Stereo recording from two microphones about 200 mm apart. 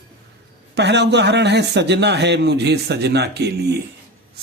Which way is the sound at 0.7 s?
55° right (ahead or behind).